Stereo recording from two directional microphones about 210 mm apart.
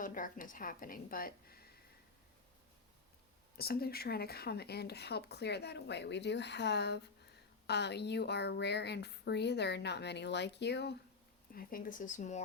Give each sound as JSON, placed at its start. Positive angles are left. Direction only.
{"t": 0.0, "sound": "a woman's voice", "side_deg": 40}
{"t": 3.6, "sound": "speech", "side_deg": 45}
{"t": 11.5, "sound": "a woman's voice", "side_deg": 40}